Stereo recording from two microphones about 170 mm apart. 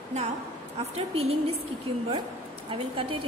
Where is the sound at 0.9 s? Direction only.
35° right (ahead or behind).